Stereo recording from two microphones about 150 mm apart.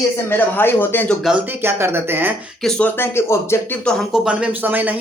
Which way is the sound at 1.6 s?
15° right (ahead or behind).